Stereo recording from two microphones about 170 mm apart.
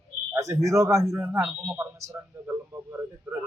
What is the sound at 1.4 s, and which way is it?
Speech, 5° right (ahead or behind).